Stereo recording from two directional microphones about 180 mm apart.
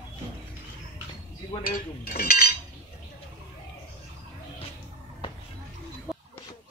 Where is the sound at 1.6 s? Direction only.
55° left (ahead or behind).